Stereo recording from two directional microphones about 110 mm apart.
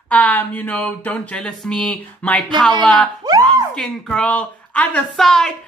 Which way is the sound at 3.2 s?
35° right (ahead or behind).